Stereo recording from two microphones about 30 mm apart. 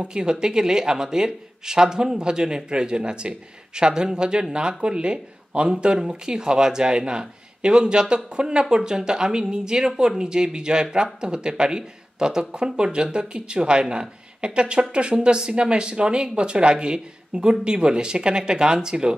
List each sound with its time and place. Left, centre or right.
0.0 s speech: right